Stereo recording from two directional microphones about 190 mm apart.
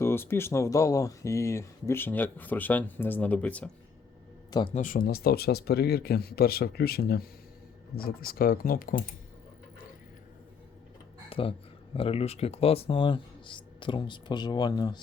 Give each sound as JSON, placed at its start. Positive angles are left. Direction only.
{"t": 0.0, "sound": "speech", "side_deg": 10}
{"t": 4.7, "sound": "speech", "side_deg": 45}
{"t": 11.3, "sound": "speech", "side_deg": 30}